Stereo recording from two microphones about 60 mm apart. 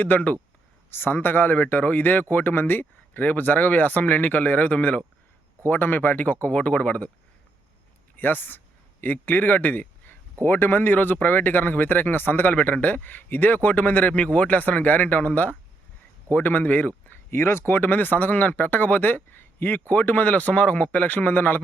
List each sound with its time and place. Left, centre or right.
0.0 s speech: left
0.9 s speech: left
5.6 s speech: left
8.1 s speech: left
17.3 s speech: left
17.7 s speech: left